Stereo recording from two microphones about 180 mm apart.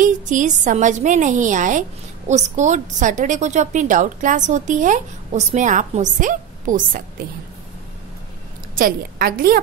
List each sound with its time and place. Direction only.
0.0 s a woman's voice: 45° right (ahead or behind)
8.7 s a woman's voice: 55° right (ahead or behind)